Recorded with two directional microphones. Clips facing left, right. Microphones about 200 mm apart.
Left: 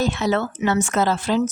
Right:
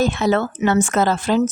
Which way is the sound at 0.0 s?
50° right (ahead or behind).